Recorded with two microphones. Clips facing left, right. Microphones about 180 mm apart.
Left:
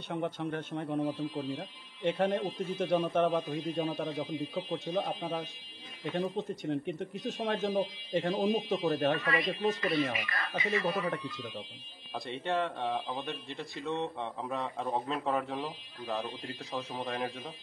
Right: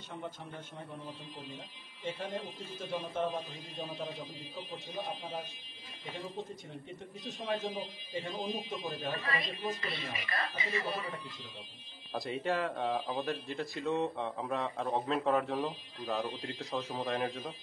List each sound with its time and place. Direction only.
0.1 s speech: 75° left (ahead or behind)
10.2 s speech: 25° right (ahead or behind)
11.1 s speech: 75° left (ahead or behind)
12.1 s speech: centre (ahead or behind)